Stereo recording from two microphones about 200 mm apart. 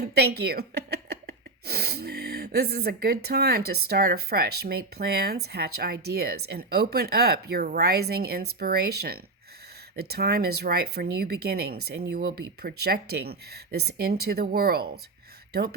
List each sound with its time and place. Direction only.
0.1 s speech: 55° right (ahead or behind)